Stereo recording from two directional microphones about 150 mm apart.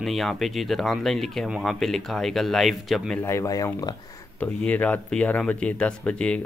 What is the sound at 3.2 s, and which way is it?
Speech, 20° left (ahead or behind).